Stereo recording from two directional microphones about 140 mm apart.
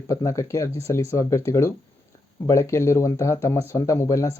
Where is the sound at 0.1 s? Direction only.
20° left (ahead or behind).